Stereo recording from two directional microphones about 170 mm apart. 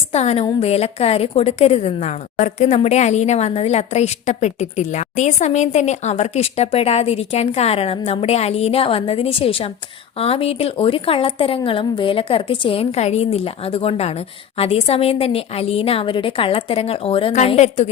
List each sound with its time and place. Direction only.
0.1 s a woman's voice: 40° left (ahead or behind)